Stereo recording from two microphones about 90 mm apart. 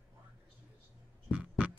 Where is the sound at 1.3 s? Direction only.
20° right (ahead or behind).